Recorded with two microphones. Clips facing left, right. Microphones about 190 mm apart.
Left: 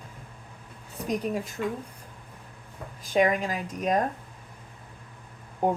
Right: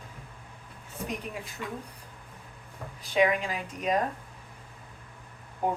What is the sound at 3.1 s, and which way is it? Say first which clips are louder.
Speech: left 2 dB; 45° left (ahead or behind).